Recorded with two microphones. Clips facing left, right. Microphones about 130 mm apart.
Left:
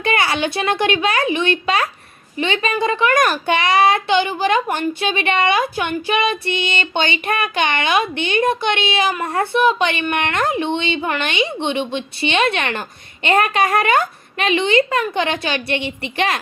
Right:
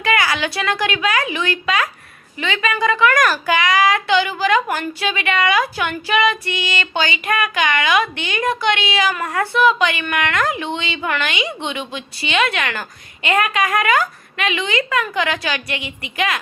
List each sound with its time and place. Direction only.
0.0 s a child's voice: 25° left (ahead or behind)